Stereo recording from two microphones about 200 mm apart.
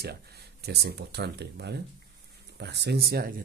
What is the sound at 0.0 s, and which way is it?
Speech, 55° right (ahead or behind).